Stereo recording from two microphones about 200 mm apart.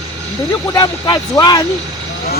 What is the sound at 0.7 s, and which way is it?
Speech, 20° left (ahead or behind).